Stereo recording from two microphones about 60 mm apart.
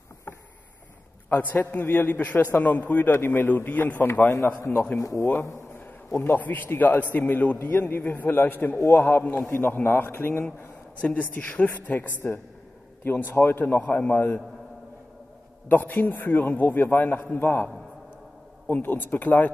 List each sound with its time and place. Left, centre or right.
1.5 s a man's voice: left
5.2 s speech: left
5.7 s a man's voice: left
11.0 s a woman's voice: left
13.0 s a man's voice: left
15.7 s a man's voice: left
18.7 s a woman's voice: left